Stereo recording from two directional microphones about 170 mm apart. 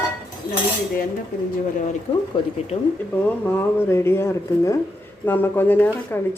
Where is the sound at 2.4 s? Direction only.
30° left (ahead or behind).